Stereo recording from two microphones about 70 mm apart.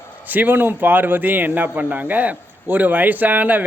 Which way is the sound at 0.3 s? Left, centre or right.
Right.